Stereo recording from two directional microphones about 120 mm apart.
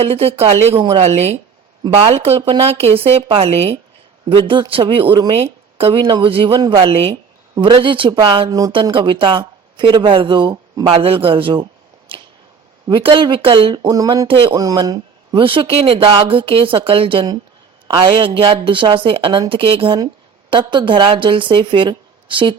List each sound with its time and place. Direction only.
0.1 s a woman's voice: 55° right (ahead or behind)
1.0 s a woman's voice: 60° right (ahead or behind)
4.3 s a woman's voice: 45° right (ahead or behind)
8.4 s a woman's voice: 30° right (ahead or behind)
8.7 s speech: 45° right (ahead or behind)
12.9 s speech: 45° right (ahead or behind); by 14.3 s 30° right (ahead or behind)
14.3 s speech: 45° right (ahead or behind)
14.5 s speech: 30° right (ahead or behind)